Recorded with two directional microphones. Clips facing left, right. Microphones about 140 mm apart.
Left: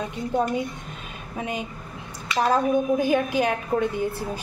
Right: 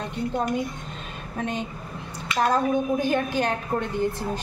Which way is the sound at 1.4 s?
10° left (ahead or behind).